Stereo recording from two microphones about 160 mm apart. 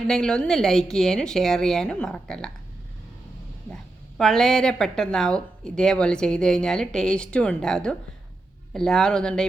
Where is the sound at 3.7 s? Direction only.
5° left (ahead or behind).